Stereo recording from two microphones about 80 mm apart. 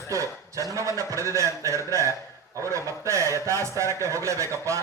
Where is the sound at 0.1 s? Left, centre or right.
Right.